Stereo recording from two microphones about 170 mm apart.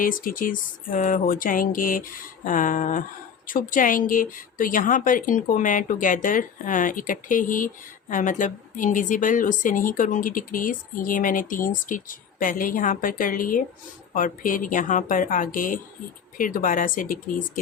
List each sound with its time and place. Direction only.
0.0 s a woman's voice: 55° left (ahead or behind)